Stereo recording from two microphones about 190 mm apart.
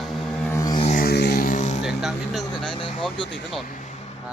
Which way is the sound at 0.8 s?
50° left (ahead or behind).